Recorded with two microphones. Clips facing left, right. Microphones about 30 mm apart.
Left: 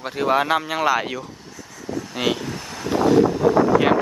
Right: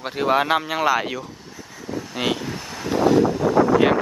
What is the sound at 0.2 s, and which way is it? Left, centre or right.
Speech, centre.